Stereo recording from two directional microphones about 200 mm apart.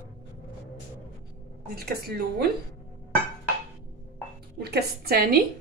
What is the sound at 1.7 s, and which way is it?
Speech, 50° right (ahead or behind).